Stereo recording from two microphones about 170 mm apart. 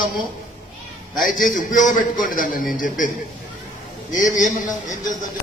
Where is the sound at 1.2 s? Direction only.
50° left (ahead or behind).